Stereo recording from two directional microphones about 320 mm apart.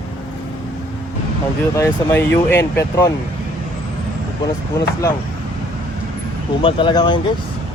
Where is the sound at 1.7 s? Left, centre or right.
Centre.